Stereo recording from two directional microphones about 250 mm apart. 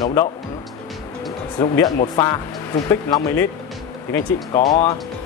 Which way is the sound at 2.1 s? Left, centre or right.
Centre.